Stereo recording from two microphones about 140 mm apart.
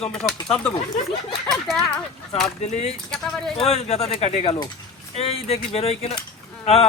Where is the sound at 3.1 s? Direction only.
5° left (ahead or behind).